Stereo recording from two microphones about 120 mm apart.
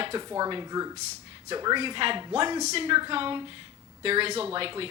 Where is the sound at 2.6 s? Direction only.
65° right (ahead or behind).